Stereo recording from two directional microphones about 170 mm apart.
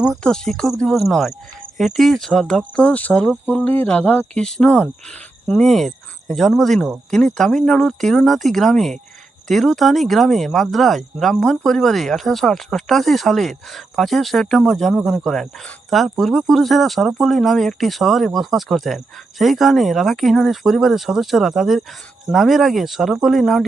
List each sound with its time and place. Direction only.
0.0 s speech: centre (ahead or behind)